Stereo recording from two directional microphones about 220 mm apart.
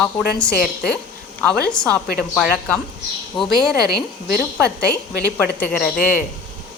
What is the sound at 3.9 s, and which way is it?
Speech, 45° left (ahead or behind).